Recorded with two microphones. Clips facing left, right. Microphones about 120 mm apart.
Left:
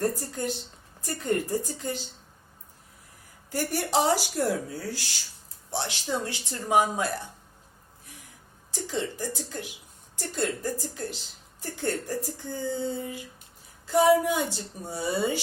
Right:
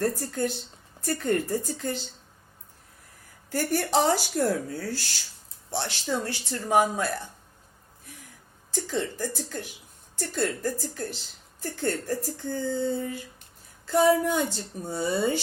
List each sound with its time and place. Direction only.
0.0 s speech: 15° left (ahead or behind)
3.5 s speech: 15° left (ahead or behind)
8.7 s speech: 15° left (ahead or behind)